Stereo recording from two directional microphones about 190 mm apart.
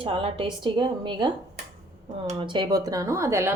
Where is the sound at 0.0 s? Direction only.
30° right (ahead or behind).